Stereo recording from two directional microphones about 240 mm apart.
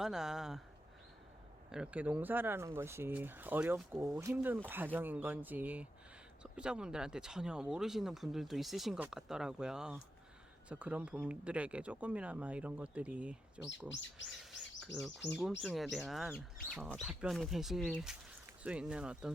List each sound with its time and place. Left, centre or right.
0.0 s speech: centre
1.7 s speech: centre
13.9 s speech: left
14.8 s speech: centre